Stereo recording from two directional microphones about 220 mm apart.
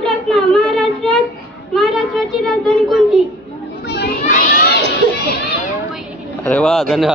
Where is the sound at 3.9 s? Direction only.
45° left (ahead or behind).